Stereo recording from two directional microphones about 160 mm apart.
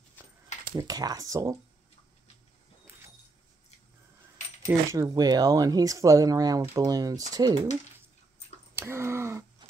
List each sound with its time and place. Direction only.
0.7 s speech: 25° right (ahead or behind)
4.6 s speech: 20° right (ahead or behind)
8.7 s a sound: 15° right (ahead or behind)